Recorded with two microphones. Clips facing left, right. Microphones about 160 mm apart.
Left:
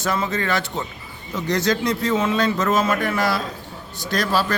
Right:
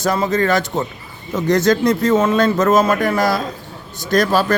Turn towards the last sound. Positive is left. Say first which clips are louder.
# right 6 dB
turn(degrees=-45)  # may be behind; listen again after turning